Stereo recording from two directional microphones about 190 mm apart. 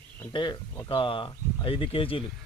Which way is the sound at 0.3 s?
25° left (ahead or behind).